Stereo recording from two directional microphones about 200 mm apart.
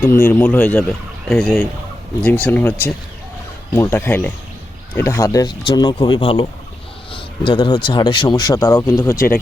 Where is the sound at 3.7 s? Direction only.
10° left (ahead or behind).